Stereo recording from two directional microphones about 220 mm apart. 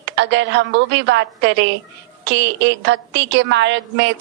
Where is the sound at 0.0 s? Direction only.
55° right (ahead or behind).